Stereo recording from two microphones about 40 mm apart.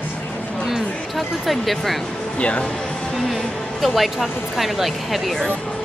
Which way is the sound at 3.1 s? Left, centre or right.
Centre.